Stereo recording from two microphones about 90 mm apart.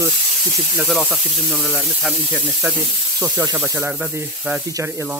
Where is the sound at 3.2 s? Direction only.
30° right (ahead or behind).